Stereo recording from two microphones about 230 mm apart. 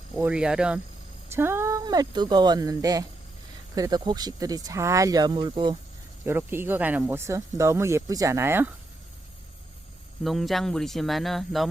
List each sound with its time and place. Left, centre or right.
0.2 s speech: centre
10.2 s speech: centre